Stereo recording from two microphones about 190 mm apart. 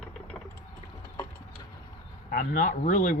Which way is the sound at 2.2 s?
45° left (ahead or behind).